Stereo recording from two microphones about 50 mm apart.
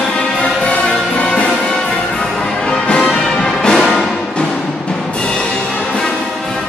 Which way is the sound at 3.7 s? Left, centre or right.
Centre.